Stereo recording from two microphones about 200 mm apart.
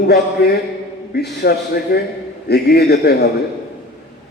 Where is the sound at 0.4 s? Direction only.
55° left (ahead or behind).